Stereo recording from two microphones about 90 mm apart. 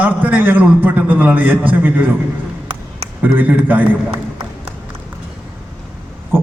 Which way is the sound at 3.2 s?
20° right (ahead or behind).